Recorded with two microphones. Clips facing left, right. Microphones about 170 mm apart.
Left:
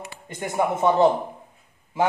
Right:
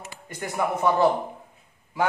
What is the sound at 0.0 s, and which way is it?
A man's voice, 20° left (ahead or behind).